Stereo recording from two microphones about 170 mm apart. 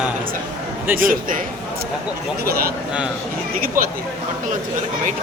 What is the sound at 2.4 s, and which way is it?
Speech, 65° right (ahead or behind).